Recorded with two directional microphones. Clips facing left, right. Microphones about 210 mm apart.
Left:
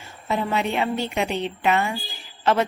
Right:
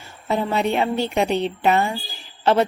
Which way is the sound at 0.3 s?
35° right (ahead or behind).